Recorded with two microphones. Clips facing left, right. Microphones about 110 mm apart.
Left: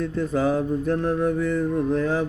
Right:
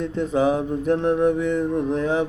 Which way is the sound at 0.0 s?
20° right (ahead or behind).